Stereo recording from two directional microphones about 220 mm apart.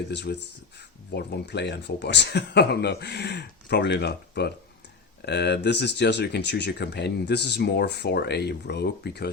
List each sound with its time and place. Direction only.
0.1 s speech: 50° left (ahead or behind)